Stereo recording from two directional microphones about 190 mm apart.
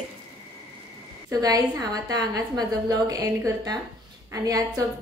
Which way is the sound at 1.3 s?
20° right (ahead or behind).